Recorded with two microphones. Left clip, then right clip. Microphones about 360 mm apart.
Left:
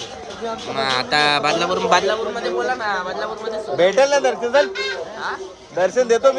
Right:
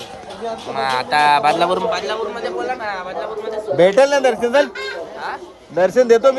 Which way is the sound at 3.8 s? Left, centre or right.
Right.